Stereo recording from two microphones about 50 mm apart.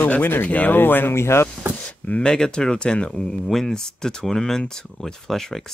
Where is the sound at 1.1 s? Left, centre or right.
Left.